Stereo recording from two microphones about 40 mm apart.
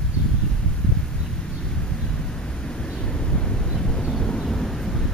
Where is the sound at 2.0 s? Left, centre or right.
Centre.